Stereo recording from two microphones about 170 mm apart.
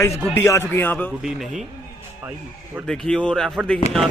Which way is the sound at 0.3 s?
15° left (ahead or behind).